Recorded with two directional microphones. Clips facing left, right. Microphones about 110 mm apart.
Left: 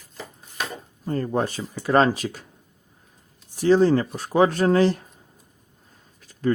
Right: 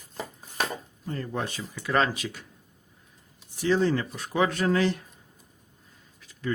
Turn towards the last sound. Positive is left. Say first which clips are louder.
# left 8 dB
turn(degrees=40)  # may be behind; listen again after turning